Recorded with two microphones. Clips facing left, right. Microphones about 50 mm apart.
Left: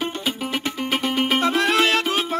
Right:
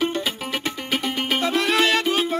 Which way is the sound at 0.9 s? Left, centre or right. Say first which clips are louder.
Left 3 dB; left.